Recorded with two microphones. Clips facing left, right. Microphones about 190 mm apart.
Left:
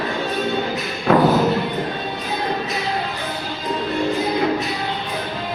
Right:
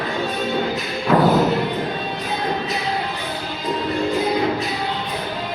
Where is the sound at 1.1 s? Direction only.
55° left (ahead or behind).